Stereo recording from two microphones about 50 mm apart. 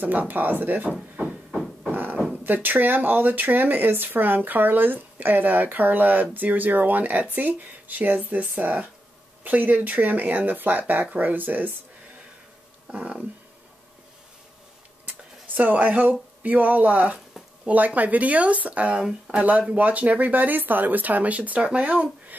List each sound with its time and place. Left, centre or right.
0.0 s speech: right
1.9 s beatboxing: right
2.3 s speech: right
12.9 s speech: right
15.4 s speech: right